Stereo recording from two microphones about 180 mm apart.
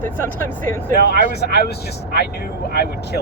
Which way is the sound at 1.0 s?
60° left (ahead or behind).